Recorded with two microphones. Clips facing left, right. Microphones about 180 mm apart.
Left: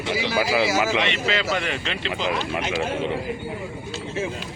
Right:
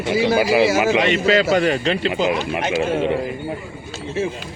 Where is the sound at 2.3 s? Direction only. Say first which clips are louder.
Right 4 dB; 15° right (ahead or behind).